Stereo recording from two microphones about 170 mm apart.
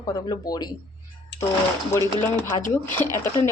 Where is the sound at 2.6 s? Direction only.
50° left (ahead or behind).